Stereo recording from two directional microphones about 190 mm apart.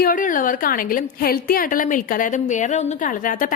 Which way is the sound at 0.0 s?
45° left (ahead or behind).